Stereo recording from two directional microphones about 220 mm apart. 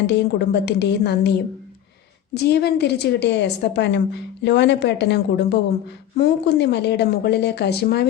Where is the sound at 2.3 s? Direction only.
50° left (ahead or behind).